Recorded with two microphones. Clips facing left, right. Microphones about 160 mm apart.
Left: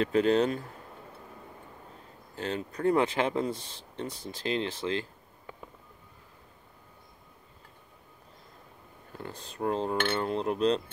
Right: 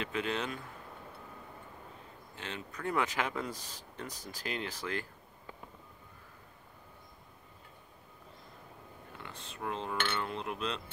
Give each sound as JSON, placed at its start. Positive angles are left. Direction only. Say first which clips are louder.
{"t": 0.0, "sound": "cutlery", "louder": "left 11 dB", "side_deg": 35}
{"t": 2.3, "sound": "speech", "louder": "left 10 dB", "side_deg": 35}
{"t": 9.2, "sound": "cutlery", "louder": "left 9 dB", "side_deg": 35}
{"t": 9.9, "sound": "cutlery", "louder": "left 7 dB", "side_deg": 45}